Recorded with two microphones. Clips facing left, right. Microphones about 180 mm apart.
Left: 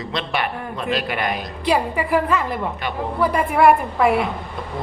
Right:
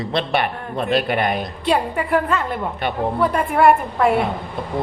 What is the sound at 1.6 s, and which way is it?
A woman's voice, centre (ahead or behind).